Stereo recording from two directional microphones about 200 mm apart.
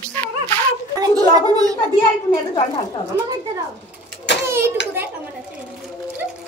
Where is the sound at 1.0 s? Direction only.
20° right (ahead or behind).